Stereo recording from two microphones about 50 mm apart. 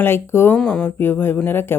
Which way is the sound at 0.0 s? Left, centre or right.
Left.